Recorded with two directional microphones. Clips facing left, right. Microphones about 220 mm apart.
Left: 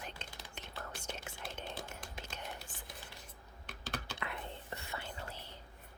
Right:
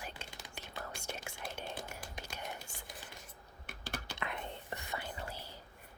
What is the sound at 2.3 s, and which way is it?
Computer keyboard, 10° right (ahead or behind).